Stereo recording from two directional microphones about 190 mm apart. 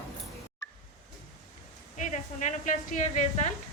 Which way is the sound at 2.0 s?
40° left (ahead or behind).